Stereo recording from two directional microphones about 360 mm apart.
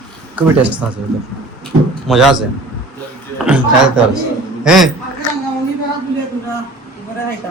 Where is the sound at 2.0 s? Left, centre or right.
Centre.